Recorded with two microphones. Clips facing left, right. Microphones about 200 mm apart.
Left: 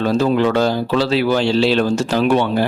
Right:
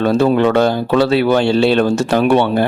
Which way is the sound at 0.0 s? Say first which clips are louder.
Right 3 dB; 60° right (ahead or behind).